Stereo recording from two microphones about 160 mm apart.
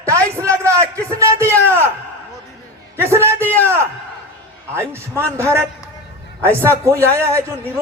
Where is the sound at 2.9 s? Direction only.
15° right (ahead or behind).